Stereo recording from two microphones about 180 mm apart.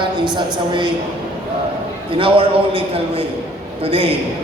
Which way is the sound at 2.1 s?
30° right (ahead or behind).